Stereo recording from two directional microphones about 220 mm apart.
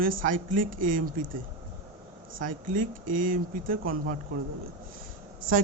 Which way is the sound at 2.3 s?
35° right (ahead or behind).